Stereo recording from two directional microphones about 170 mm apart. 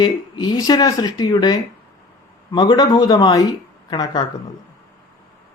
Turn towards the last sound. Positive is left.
turn(degrees=25)  # may be behind; listen again after turning